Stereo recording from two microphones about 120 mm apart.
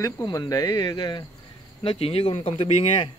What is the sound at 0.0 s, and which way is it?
Speech, 35° left (ahead or behind).